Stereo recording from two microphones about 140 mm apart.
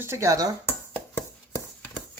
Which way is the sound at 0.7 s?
15° left (ahead or behind).